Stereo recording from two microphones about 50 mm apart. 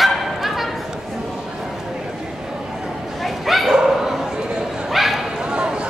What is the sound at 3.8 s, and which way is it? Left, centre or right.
Dog, centre.